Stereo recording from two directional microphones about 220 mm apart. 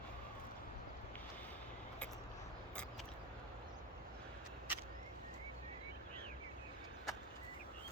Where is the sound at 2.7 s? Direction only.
5° left (ahead or behind).